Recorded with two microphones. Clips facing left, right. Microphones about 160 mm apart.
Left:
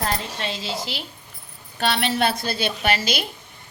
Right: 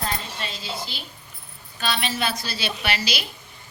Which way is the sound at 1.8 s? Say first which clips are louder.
Left 5 dB; 65° left (ahead or behind).